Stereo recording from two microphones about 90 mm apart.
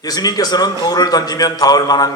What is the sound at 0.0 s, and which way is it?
A man's voice, 45° left (ahead or behind).